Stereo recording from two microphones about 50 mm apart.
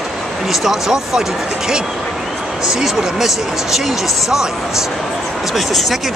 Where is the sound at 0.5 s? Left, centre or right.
Centre.